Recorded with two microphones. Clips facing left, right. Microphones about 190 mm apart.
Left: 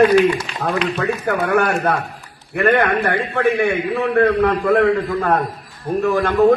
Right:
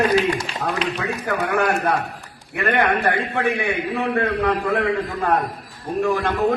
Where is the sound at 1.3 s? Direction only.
65° left (ahead or behind).